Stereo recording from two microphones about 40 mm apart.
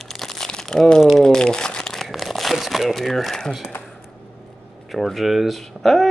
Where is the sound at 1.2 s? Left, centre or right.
Centre.